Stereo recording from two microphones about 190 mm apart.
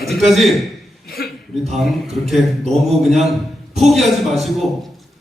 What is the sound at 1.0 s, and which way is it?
Chuckle, 50° left (ahead or behind).